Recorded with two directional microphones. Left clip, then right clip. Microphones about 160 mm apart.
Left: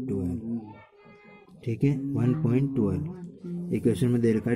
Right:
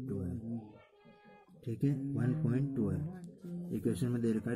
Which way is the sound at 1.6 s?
15° left (ahead or behind).